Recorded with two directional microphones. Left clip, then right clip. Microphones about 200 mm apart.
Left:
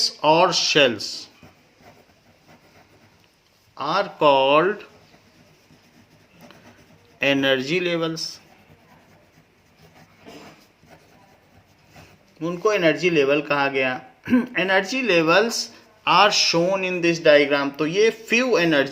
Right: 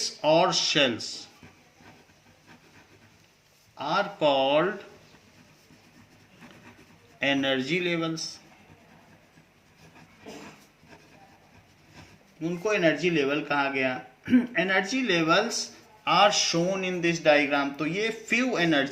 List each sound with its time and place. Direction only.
0.3 s speech: 50° left (ahead or behind)
3.8 s speech: 50° left (ahead or behind)
7.2 s speech: 50° left (ahead or behind)
12.4 s speech: 55° left (ahead or behind)